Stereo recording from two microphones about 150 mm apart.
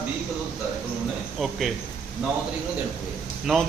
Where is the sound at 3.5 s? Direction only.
Centre (ahead or behind).